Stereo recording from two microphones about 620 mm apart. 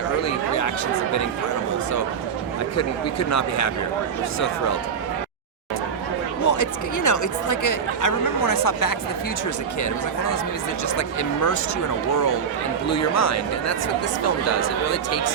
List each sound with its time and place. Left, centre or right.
0.2 s chatter: left
2.7 s speech: left
6.4 s speech: left
10.8 s speech: left